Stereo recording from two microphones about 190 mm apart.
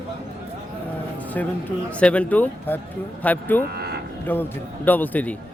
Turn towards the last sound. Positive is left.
turn(degrees=10)  # may be behind; listen again after turning